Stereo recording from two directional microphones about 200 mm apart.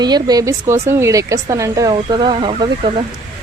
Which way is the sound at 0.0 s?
20° right (ahead or behind).